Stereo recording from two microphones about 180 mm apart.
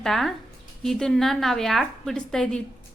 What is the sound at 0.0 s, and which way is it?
A woman's voice, centre (ahead or behind).